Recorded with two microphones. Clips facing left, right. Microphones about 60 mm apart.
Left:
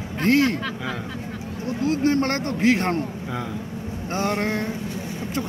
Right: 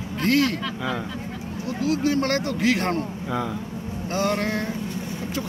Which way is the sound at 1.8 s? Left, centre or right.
Left.